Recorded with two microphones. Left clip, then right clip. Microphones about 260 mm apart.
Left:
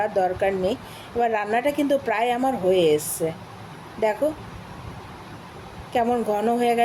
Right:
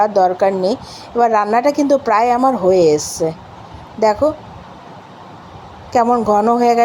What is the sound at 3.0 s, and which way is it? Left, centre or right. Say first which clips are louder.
Speech: right 9 dB; centre.